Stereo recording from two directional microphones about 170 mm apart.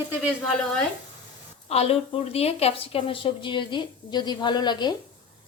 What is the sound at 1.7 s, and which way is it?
Speech, 40° left (ahead or behind).